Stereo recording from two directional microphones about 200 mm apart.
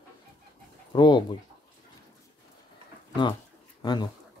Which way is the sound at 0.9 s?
20° left (ahead or behind).